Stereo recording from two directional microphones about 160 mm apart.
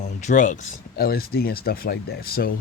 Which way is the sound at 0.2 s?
50° left (ahead or behind).